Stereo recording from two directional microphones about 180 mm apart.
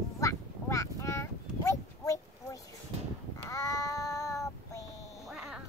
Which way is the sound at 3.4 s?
15° left (ahead or behind).